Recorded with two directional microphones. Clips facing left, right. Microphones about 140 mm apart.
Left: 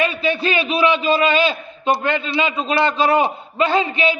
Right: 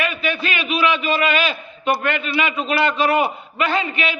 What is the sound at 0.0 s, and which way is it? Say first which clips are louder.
A man's voice: left 4 dB; 30° left (ahead or behind).